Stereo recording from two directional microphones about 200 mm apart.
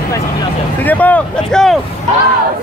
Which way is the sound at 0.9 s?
10° left (ahead or behind).